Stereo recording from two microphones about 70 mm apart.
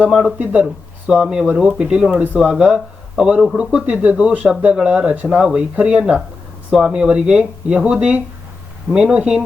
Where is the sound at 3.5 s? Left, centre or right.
Centre.